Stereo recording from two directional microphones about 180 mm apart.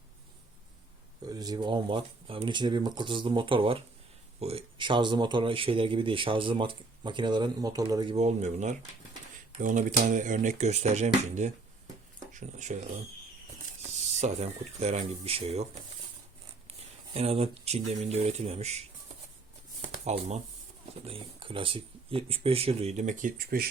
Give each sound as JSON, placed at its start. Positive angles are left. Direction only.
{"t": 1.2, "sound": "speech", "side_deg": -20}
{"t": 8.1, "sound": "speech", "side_deg": -40}
{"t": 14.2, "sound": "speech", "side_deg": -35}
{"t": 17.2, "sound": "speech", "side_deg": -35}
{"t": 20.1, "sound": "speech", "side_deg": -40}